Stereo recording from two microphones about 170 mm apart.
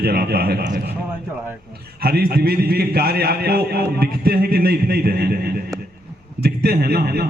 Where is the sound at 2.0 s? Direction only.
65° right (ahead or behind).